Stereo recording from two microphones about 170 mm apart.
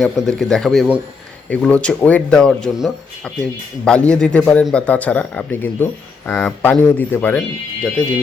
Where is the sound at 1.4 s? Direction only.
5° left (ahead or behind).